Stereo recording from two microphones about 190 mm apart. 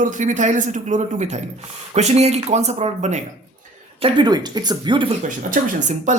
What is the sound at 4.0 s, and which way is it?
Speech, 25° right (ahead or behind).